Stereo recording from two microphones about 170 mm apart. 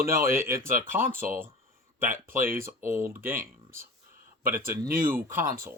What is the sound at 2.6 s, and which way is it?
Speech, 15° right (ahead or behind).